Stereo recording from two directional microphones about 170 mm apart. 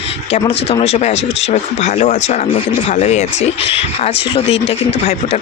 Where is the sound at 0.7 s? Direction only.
40° left (ahead or behind).